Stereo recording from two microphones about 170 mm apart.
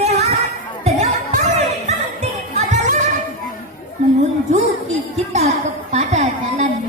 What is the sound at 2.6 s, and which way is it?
Music, 45° right (ahead or behind).